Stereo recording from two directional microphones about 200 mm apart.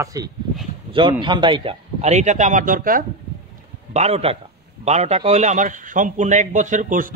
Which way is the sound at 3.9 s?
35° right (ahead or behind).